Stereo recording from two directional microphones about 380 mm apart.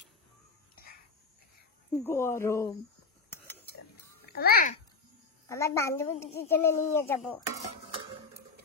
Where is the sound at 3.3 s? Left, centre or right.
Centre.